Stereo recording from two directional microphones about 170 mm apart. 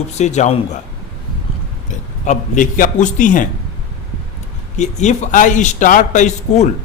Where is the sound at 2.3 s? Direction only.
50° left (ahead or behind).